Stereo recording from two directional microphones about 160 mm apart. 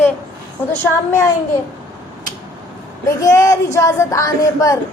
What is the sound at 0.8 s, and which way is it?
Speech, 20° left (ahead or behind).